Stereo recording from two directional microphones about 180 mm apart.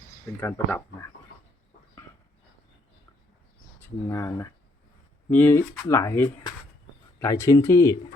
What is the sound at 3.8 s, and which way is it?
Speech, 15° left (ahead or behind).